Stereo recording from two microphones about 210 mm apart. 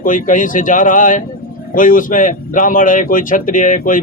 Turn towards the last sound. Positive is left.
turn(degrees=40)  # may be behind; listen again after turning